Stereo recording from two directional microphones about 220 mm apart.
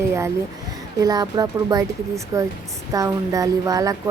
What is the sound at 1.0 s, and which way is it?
A woman's voice, 15° right (ahead or behind).